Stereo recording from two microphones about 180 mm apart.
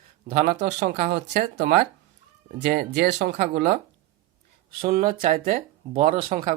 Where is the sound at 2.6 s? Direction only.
60° right (ahead or behind).